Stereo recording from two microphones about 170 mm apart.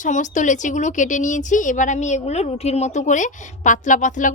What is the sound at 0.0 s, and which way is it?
Speech, 45° left (ahead or behind).